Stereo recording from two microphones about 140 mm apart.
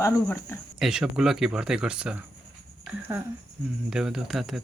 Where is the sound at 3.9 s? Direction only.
5° right (ahead or behind).